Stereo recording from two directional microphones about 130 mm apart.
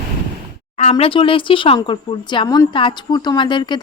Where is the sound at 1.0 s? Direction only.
45° left (ahead or behind).